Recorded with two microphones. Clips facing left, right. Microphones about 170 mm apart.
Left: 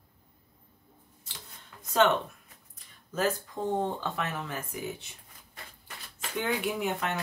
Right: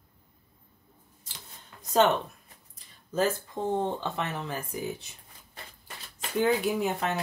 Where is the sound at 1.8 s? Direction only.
40° right (ahead or behind).